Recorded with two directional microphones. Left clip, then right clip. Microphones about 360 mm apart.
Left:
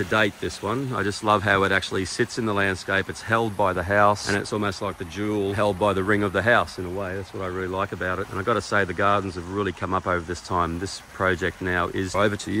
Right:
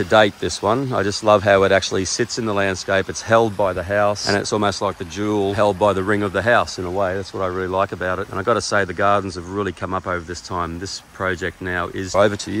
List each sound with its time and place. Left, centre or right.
0.0 s speech: centre